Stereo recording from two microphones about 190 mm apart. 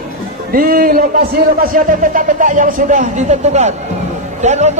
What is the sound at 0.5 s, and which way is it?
A man's voice, 50° right (ahead or behind).